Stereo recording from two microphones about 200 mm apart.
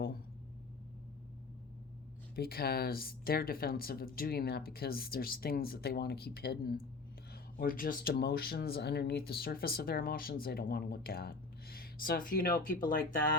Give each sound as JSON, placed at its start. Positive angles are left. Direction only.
{"t": 2.3, "sound": "speech", "side_deg": 50}